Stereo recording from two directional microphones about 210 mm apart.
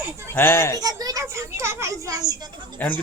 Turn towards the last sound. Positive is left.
turn(degrees=10)  # may be behind; listen again after turning